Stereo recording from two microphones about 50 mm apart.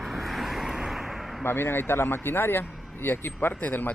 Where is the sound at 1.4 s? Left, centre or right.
Left.